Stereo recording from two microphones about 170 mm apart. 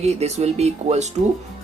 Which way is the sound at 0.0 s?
40° right (ahead or behind).